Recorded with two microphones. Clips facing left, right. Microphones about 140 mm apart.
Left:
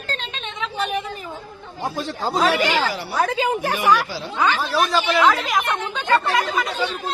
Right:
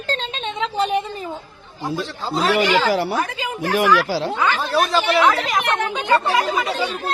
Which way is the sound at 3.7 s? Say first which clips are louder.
Right 7 dB; 90° right.